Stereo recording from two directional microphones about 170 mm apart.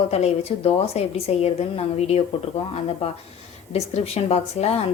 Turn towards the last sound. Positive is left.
turn(degrees=40)  # may be behind; listen again after turning